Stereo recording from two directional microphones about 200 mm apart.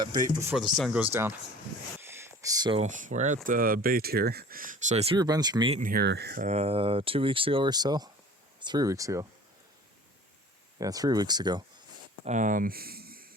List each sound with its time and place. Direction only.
0.0 s speech: 20° right (ahead or behind)
0.5 s speech: centre (ahead or behind)
2.0 s a sound: 10° right (ahead or behind)
2.7 s speech: 40° right (ahead or behind)
5.1 s speech: 20° right (ahead or behind)
5.8 s speech: 50° right (ahead or behind)
6.5 s speech: 30° right (ahead or behind); by 9.2 s 15° right (ahead or behind)
10.8 s speech: 20° right (ahead or behind)
12.2 s speech: 40° right (ahead or behind)